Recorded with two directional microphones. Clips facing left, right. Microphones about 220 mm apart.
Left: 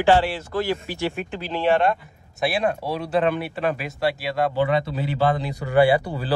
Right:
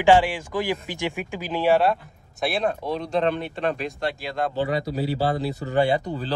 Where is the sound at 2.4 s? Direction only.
5° left (ahead or behind).